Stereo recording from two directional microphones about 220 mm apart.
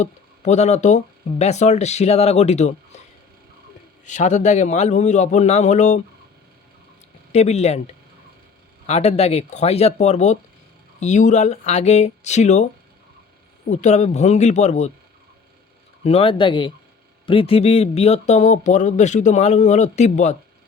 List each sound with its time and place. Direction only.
0.0 s speech: 30° left (ahead or behind)
4.0 s speech: 35° left (ahead or behind)
7.3 s speech: 30° left (ahead or behind)
8.9 s speech: 30° left (ahead or behind)
13.7 s speech: 30° left (ahead or behind)
16.0 s speech: 25° left (ahead or behind)